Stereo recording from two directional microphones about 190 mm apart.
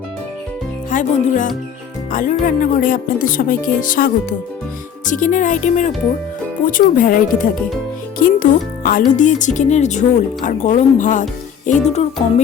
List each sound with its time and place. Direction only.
0.9 s speech: 40° left (ahead or behind)